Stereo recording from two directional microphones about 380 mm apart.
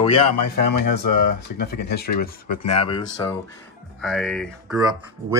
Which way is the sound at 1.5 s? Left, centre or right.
Left.